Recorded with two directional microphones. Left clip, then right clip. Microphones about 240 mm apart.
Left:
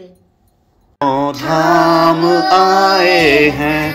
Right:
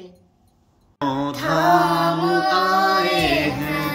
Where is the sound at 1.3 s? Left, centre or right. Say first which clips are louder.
Left 4 dB; right.